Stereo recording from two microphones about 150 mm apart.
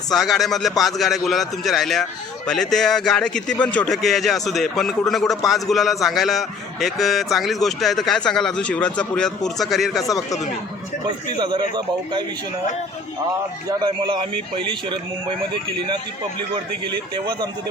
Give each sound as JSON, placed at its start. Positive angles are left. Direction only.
{"t": 0.1, "sound": "speech", "side_deg": 0}
{"t": 10.0, "sound": "a man's voice", "side_deg": 20}
{"t": 11.3, "sound": "a man's voice", "side_deg": -30}
{"t": 13.7, "sound": "a man's voice", "side_deg": -30}
{"t": 16.8, "sound": "a man's voice", "side_deg": -30}